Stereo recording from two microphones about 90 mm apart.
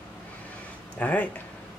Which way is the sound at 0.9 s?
15° left (ahead or behind).